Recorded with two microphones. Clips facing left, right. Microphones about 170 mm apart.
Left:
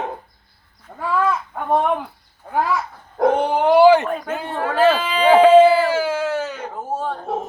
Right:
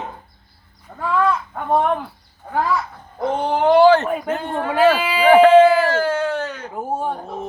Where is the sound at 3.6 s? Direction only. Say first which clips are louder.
Even; 10° left (ahead or behind).